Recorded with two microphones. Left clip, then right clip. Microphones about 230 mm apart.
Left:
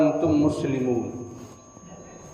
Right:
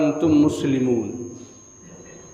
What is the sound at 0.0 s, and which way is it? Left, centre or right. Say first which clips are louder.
Speech: right 2 dB; right.